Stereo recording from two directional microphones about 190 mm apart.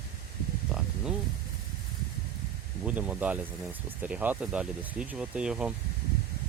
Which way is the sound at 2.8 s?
5° right (ahead or behind).